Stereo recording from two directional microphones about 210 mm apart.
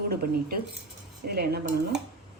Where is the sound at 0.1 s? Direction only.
45° right (ahead or behind).